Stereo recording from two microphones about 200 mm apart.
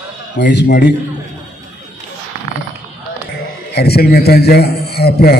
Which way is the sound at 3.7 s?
55° left (ahead or behind).